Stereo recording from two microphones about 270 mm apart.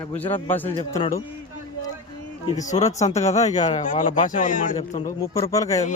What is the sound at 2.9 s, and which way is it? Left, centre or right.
A man's voice, left.